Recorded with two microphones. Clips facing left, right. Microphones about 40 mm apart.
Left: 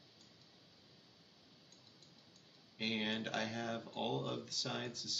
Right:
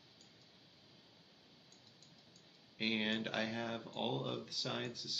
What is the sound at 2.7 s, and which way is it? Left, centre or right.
A man's voice, centre.